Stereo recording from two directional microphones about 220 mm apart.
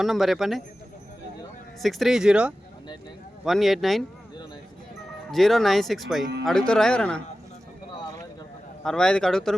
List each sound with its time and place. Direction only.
0.0 s speech: centre (ahead or behind)
1.8 s speech: centre (ahead or behind)
5.3 s speech: centre (ahead or behind)
8.8 s speech: 5° left (ahead or behind)